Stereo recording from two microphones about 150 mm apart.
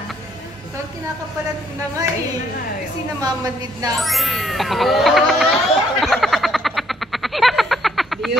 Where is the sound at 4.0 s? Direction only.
Centre (ahead or behind).